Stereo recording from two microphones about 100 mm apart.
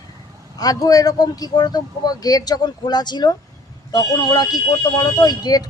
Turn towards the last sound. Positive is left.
turn(degrees=40)  # may be behind; listen again after turning